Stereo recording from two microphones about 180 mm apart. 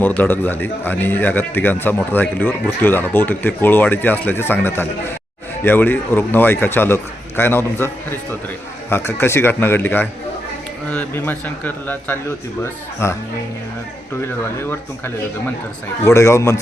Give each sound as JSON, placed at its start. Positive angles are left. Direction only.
{"t": 0.0, "sound": "speech", "side_deg": 10}
{"t": 14.7, "sound": "speech", "side_deg": 10}